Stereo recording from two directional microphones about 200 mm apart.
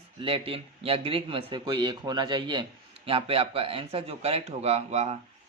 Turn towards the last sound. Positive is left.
turn(degrees=-35)  # may be behind; listen again after turning